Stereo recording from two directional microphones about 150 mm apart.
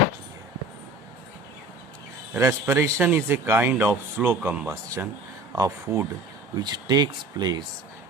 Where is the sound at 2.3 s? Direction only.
15° right (ahead or behind).